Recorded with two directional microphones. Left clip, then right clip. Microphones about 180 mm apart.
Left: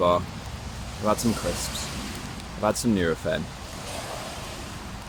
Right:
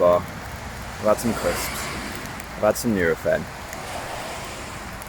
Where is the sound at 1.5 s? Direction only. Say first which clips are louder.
Right 5 dB; 85° left.